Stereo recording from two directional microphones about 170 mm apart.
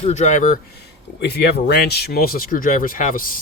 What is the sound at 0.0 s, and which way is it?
Speech, 45° left (ahead or behind).